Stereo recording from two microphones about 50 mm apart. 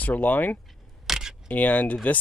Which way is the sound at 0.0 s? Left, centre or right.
Left.